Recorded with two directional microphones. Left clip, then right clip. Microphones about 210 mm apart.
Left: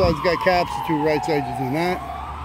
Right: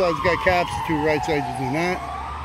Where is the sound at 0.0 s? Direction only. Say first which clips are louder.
Left 1 dB; 5° left (ahead or behind).